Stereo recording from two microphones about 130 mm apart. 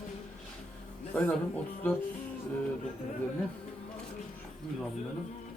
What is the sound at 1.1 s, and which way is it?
Speech, 10° left (ahead or behind).